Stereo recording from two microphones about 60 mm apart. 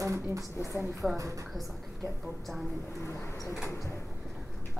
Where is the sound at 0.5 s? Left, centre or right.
Left.